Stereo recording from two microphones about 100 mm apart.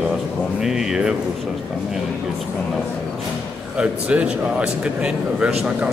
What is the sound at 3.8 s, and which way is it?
A man's voice, 10° right (ahead or behind).